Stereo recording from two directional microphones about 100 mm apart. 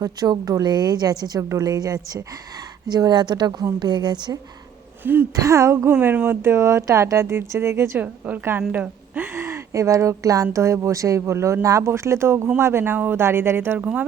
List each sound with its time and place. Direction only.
0.0 s a woman's voice: 40° right (ahead or behind)
5.3 s a woman's voice: 35° right (ahead or behind)
5.9 s a woman's voice: 15° right (ahead or behind)
13.7 s a woman's voice: 10° right (ahead or behind)